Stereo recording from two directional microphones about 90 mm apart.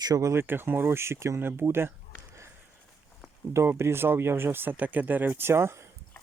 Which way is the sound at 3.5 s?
30° right (ahead or behind).